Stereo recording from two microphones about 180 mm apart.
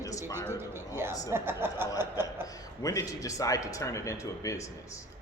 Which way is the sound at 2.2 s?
20° left (ahead or behind).